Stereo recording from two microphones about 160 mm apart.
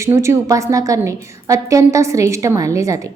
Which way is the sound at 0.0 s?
15° right (ahead or behind).